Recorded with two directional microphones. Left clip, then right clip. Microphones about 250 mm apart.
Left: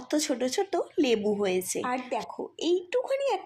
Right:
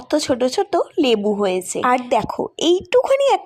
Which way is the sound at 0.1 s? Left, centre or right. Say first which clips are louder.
Right 10 dB; centre.